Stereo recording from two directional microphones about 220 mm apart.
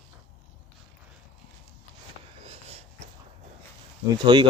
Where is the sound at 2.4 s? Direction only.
25° right (ahead or behind).